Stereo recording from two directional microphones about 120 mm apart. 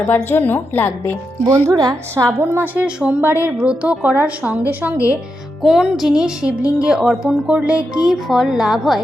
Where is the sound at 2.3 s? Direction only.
20° right (ahead or behind).